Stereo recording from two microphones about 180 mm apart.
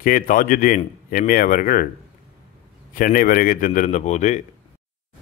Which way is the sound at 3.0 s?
50° left (ahead or behind).